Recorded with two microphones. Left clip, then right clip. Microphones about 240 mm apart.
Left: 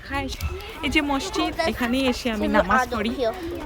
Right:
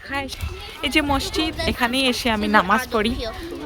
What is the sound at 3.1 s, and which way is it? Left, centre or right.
Speech, left.